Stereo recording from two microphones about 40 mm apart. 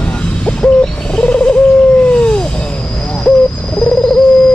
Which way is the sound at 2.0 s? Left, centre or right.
Left.